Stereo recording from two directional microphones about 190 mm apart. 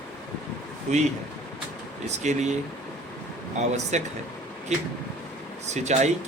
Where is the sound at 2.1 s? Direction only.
35° right (ahead or behind).